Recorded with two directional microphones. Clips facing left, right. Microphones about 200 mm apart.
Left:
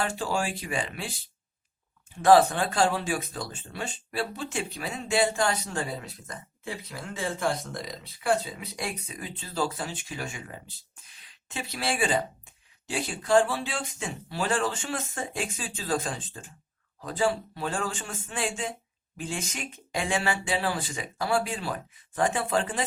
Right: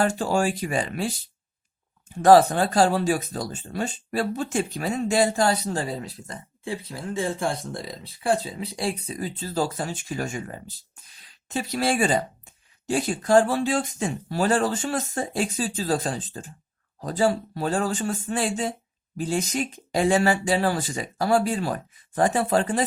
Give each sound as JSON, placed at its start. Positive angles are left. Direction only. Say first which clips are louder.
{"t": 0.0, "sound": "speech", "louder": "right 7 dB", "side_deg": -45}
{"t": 2.2, "sound": "speech", "louder": "right 4 dB", "side_deg": -40}